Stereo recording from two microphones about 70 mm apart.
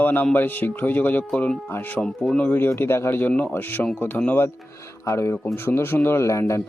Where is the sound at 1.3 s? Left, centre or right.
Centre.